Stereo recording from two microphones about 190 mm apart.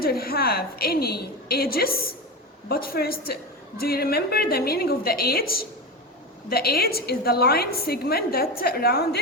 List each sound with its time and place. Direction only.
0.0 s a woman's voice: 55° left (ahead or behind)